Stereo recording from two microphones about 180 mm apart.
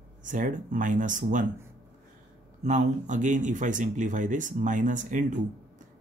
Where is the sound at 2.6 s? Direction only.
40° right (ahead or behind).